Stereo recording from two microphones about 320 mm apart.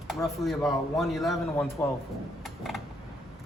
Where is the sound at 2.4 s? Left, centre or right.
Centre.